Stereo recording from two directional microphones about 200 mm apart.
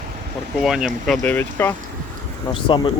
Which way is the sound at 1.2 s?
10° left (ahead or behind).